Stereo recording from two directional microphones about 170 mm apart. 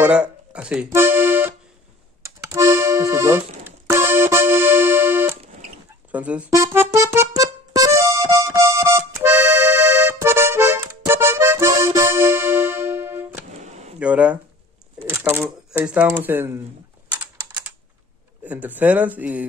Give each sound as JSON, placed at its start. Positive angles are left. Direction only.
{"t": 0.0, "sound": "music", "side_deg": -5}
{"t": 2.5, "sound": "accordion", "side_deg": -15}
{"t": 6.1, "sound": "music", "side_deg": -10}
{"t": 13.5, "sound": "a sound", "side_deg": -40}
{"t": 13.9, "sound": "speech", "side_deg": -5}
{"t": 18.4, "sound": "speech", "side_deg": -10}